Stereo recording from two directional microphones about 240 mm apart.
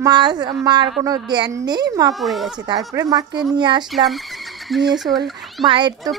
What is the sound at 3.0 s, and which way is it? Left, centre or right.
Speech, centre.